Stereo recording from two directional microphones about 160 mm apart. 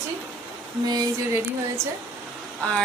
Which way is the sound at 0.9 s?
20° right (ahead or behind).